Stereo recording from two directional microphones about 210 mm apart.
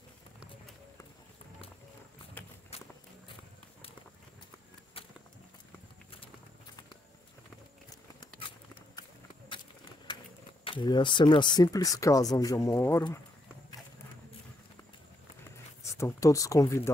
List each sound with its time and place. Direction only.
2.7 s walk: 30° left (ahead or behind)
5.0 s walk: 25° left (ahead or behind)
8.4 s a sound: 25° left (ahead or behind)
10.6 s speech: 25° left (ahead or behind)
15.8 s speech: 15° left (ahead or behind)